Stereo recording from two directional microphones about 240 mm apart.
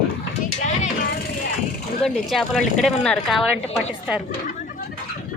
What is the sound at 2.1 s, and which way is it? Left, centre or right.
Speech, centre.